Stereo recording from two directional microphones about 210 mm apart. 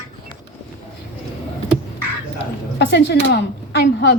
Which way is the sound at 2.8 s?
55° left (ahead or behind).